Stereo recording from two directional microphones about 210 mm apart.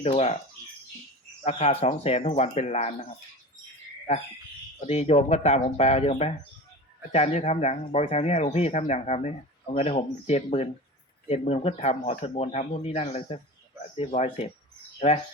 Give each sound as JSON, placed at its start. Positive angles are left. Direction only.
{"t": 0.0, "sound": "speech", "side_deg": 30}
{"t": 1.5, "sound": "speech", "side_deg": 30}
{"t": 4.1, "sound": "speech", "side_deg": 30}